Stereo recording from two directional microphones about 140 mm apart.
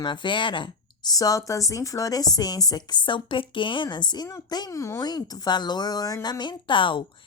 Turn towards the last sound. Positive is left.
turn(degrees=35)  # may be behind; listen again after turning